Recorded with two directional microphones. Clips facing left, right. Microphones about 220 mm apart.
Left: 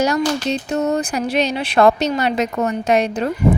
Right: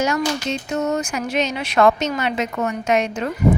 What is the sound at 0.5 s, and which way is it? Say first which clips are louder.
Speech: left 3 dB; 35° left (ahead or behind).